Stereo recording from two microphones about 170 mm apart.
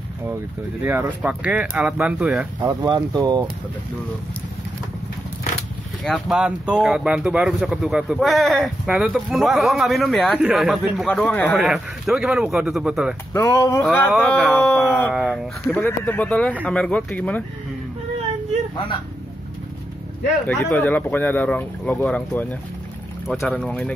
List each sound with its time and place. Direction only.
0.8 s speech: 10° right (ahead or behind)
2.6 s speech: 25° right (ahead or behind)
6.0 s speech: centre (ahead or behind)
11.1 s speech: 10° left (ahead or behind)
11.5 s speech: centre (ahead or behind)
13.3 s speech: 15° left (ahead or behind)
14.1 s speech: centre (ahead or behind)
15.8 s speech: 10° left (ahead or behind)
20.4 s speech: 10° left (ahead or behind)